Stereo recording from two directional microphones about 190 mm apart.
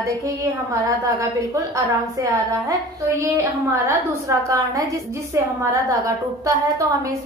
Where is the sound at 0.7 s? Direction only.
15° right (ahead or behind).